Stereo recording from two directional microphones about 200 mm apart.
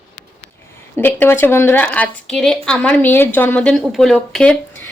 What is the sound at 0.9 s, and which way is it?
A woman's voice, 10° left (ahead or behind).